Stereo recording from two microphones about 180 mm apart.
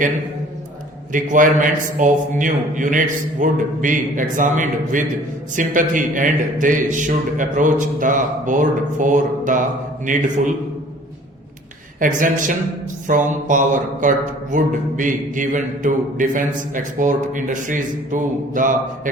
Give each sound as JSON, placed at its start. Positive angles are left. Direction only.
{"t": 1.1, "sound": "mantra", "side_deg": -45}
{"t": 11.9, "sound": "mantra", "side_deg": -45}